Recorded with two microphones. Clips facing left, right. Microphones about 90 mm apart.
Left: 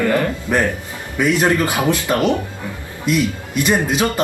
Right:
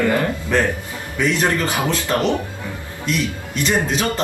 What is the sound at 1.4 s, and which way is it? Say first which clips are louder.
Speech: left 3 dB; 15° left (ahead or behind).